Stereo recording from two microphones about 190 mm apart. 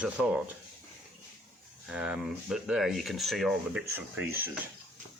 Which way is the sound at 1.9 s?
5° right (ahead or behind).